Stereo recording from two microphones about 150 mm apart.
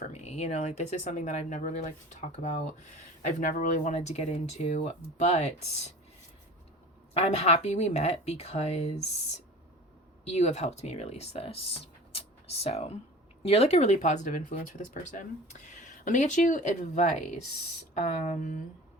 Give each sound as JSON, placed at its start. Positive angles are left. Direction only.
{"t": 0.1, "sound": "speech", "side_deg": 45}
{"t": 7.1, "sound": "speech", "side_deg": 45}
{"t": 10.2, "sound": "speech", "side_deg": 45}